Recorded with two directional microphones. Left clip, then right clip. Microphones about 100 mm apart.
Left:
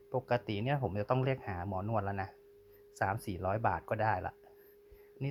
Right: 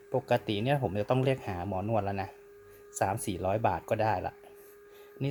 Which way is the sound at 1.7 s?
30° right (ahead or behind).